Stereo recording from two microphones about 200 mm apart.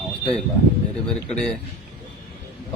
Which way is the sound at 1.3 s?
Centre (ahead or behind).